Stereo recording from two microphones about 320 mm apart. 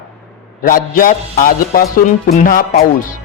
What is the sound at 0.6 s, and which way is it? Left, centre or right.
A man's voice, left.